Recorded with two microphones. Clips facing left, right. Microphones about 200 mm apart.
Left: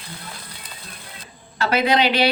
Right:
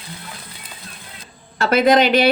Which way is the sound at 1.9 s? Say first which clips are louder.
Right 4 dB; 50° right (ahead or behind).